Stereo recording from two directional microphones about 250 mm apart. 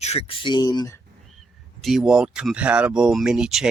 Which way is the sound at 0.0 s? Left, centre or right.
Left.